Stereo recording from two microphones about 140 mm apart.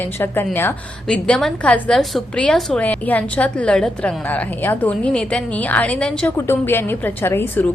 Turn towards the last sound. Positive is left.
turn(degrees=15)  # may be behind; listen again after turning